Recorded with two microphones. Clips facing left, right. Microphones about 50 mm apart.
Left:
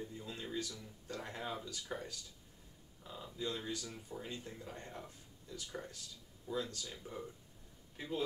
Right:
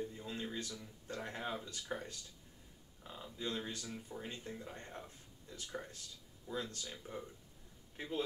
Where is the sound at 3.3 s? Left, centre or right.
Right.